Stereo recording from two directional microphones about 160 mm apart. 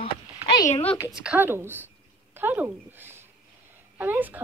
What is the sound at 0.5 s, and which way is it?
Speech, 25° left (ahead or behind).